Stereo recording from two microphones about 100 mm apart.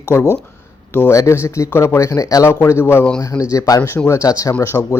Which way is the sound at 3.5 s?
35° left (ahead or behind).